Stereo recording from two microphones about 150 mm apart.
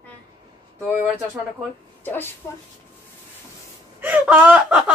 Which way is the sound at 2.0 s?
15° left (ahead or behind).